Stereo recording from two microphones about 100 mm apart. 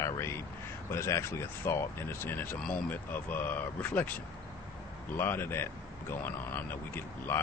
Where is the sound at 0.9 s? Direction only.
25° left (ahead or behind).